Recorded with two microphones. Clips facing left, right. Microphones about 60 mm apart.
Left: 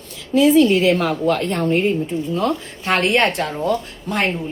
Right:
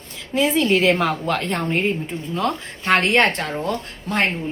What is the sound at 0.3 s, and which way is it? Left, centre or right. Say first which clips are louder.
Speech: left 5 dB; right.